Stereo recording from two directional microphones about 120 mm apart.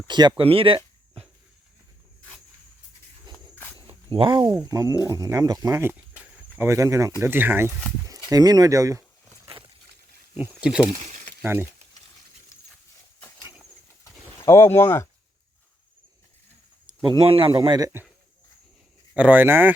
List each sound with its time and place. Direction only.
0.1 s speech: 40° right (ahead or behind)
0.4 s speech: 50° right (ahead or behind)
3.8 s a sound: 45° right (ahead or behind)
4.6 s speech: 25° right (ahead or behind)
8.3 s speech: 30° right (ahead or behind)
10.5 s speech: 10° right (ahead or behind)
10.9 s a sound: 90° right
11.4 s speech: 20° right (ahead or behind)
14.0 s a sound: 25° left (ahead or behind)
16.8 s speech: 40° right (ahead or behind)
17.6 s speech: 35° right (ahead or behind)
19.1 s speech: 10° right (ahead or behind)